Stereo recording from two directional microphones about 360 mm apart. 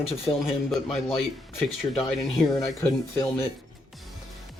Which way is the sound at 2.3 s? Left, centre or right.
Centre.